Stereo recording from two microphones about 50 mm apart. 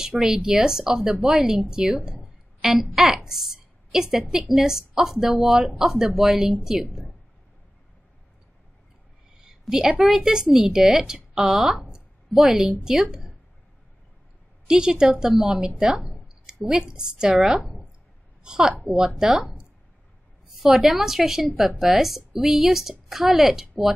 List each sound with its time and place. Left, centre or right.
0.0 s a woman's voice: centre
9.4 s a sound: centre
10.0 s a woman's voice: centre
14.7 s a woman's voice: centre
17.4 s a woman's voice: centre
18.4 s a woman's voice: centre